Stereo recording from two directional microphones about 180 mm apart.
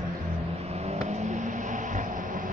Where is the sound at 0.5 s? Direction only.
35° right (ahead or behind).